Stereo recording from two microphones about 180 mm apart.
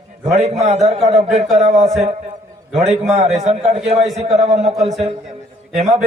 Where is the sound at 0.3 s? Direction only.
35° right (ahead or behind).